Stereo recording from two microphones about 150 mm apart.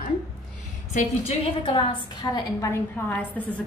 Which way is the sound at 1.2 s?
40° left (ahead or behind).